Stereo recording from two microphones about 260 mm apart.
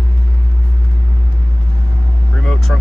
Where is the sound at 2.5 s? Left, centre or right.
Centre.